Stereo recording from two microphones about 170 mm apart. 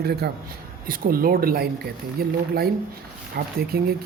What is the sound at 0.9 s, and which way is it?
Speech, 55° right (ahead or behind).